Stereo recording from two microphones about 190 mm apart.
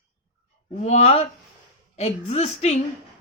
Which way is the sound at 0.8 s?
35° left (ahead or behind).